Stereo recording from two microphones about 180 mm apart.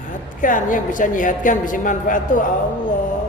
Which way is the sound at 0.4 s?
45° left (ahead or behind).